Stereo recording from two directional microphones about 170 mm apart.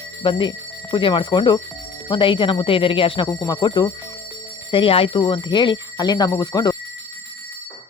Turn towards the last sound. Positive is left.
turn(degrees=20)  # may be behind; listen again after turning